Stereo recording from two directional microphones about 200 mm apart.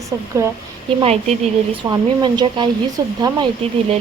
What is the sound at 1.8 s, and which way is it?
Speech, 20° right (ahead or behind).